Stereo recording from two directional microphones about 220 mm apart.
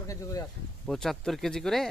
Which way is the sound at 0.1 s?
15° left (ahead or behind).